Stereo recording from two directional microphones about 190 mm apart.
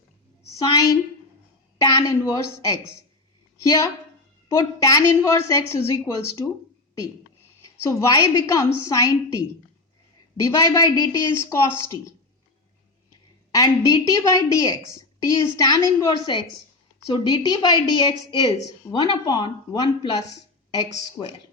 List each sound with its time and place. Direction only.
0.6 s a woman's voice: 20° left (ahead or behind)
7.6 s a woman's voice: 15° left (ahead or behind)
10.4 s a woman's voice: 15° left (ahead or behind)
13.5 s a woman's voice: 15° left (ahead or behind)
21.2 s a woman's voice: 10° left (ahead or behind)